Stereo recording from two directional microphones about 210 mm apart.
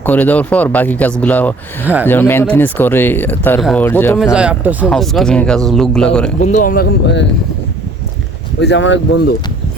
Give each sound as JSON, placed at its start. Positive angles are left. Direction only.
{"t": 0.0, "sound": "speech", "side_deg": 10}
{"t": 4.2, "sound": "speech", "side_deg": -5}
{"t": 6.4, "sound": "speech", "side_deg": 35}
{"t": 8.6, "sound": "speech", "side_deg": 60}